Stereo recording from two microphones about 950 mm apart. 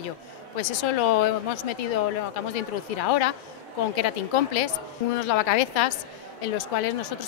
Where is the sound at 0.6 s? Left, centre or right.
Left.